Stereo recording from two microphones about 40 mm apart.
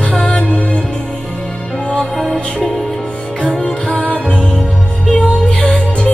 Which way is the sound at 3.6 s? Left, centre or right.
Left.